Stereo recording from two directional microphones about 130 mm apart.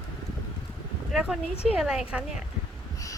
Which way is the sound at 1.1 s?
5° right (ahead or behind).